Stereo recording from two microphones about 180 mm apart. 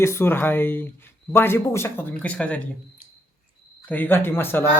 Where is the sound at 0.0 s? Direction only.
15° left (ahead or behind).